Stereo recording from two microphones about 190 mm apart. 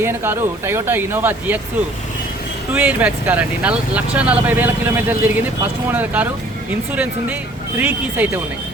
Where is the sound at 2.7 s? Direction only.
10° right (ahead or behind).